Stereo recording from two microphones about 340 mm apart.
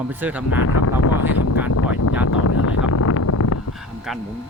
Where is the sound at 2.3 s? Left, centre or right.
Left.